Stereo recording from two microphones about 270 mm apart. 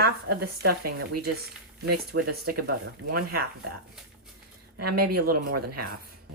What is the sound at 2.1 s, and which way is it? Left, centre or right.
Speech, right.